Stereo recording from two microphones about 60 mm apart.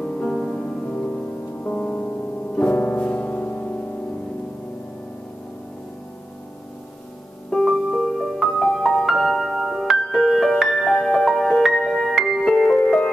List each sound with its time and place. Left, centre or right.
0.0 s music: centre
1.6 s piano: centre
7.7 s music: centre
8.6 s music: centre
12.5 s music: centre